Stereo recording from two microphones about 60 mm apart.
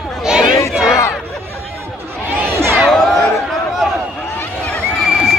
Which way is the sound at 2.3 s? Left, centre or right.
Right.